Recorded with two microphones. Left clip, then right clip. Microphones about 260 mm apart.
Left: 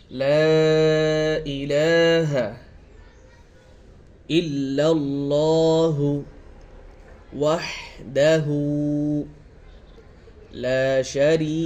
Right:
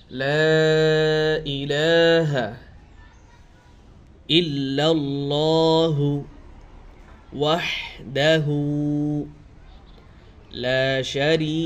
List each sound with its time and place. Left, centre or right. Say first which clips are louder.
0.2 s mantra: left 1 dB; centre
1.7 s speech: even; centre
4.3 s mantra: right 2 dB; right
7.3 s mantra: right 1 dB; centre
10.6 s speech: left 1 dB; centre